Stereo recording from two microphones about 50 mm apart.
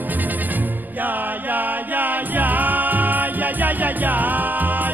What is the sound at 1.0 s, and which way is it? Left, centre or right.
Music, right.